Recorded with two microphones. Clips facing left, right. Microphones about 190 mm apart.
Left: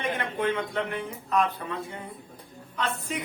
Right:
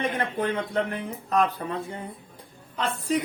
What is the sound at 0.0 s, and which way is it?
Speech, 40° right (ahead or behind).